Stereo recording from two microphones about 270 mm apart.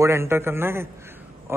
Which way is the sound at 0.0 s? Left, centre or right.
Centre.